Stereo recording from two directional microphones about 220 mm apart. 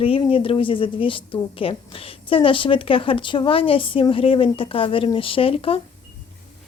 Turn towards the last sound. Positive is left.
turn(degrees=25)  # may be behind; listen again after turning